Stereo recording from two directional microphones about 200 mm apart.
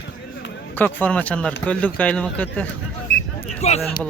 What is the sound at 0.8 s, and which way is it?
Speech, 10° left (ahead or behind).